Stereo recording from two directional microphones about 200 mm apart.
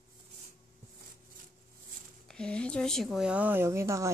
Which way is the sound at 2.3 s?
5° left (ahead or behind).